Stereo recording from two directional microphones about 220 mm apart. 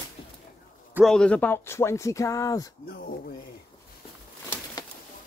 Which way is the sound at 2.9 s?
40° left (ahead or behind).